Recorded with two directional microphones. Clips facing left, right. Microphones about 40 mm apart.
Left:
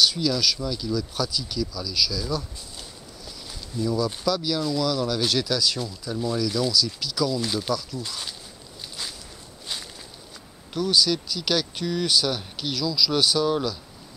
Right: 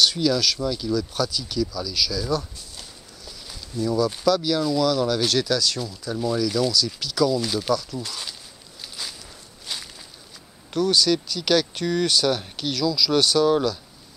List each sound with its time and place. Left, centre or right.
0.0 s speech: centre
3.8 s speech: centre
10.7 s speech: centre